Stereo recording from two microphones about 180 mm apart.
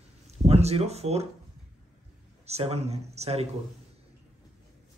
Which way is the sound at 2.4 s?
35° right (ahead or behind).